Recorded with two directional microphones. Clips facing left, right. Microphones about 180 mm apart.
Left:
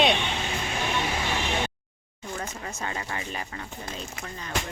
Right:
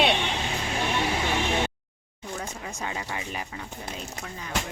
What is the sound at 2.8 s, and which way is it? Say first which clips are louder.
Speech: even; 10° right (ahead or behind).